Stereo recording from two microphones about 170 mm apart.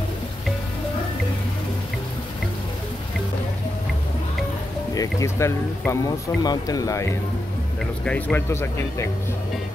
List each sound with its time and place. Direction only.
4.9 s speech: 20° left (ahead or behind)
8.0 s speech: 10° left (ahead or behind)